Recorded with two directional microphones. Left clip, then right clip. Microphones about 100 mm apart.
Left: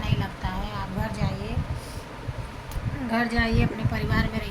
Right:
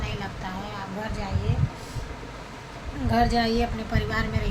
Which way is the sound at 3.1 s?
30° right (ahead or behind).